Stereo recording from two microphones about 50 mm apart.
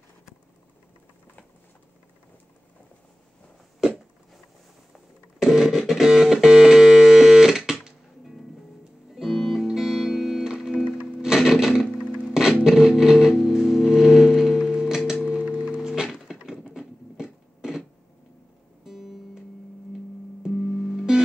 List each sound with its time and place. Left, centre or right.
5.4 s music: centre
15.4 s music: right
15.9 s a sound: centre
16.7 s a sound: centre
18.9 s music: centre
20.4 s music: centre